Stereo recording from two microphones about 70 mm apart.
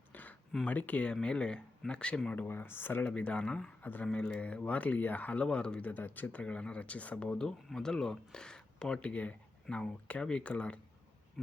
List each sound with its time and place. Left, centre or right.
0.1 s a sound: left
0.6 s speech: left
2.5 s speech: left
3.1 s speech: centre
3.8 s speech: left
5.9 s speech: left